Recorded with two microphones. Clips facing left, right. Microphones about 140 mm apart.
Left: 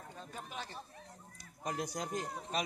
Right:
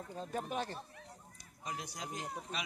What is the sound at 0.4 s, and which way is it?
Speech, 50° right (ahead or behind).